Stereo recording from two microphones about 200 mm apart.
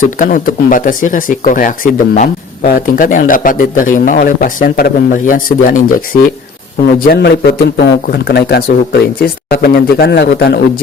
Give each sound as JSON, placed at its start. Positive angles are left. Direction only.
{"t": 0.0, "sound": "speech", "side_deg": 45}
{"t": 7.0, "sound": "speech", "side_deg": 50}